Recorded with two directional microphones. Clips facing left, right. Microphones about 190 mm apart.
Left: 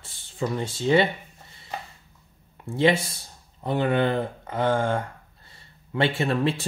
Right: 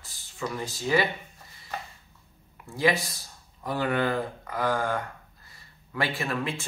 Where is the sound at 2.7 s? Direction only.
25° left (ahead or behind).